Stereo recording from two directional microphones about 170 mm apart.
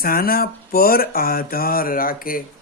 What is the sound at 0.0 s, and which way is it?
Speech, 60° left (ahead or behind).